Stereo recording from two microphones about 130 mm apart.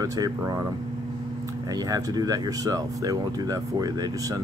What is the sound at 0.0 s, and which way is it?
Speech, 25° right (ahead or behind).